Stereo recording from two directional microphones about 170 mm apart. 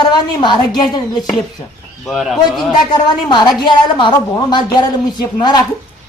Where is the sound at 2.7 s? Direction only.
25° left (ahead or behind).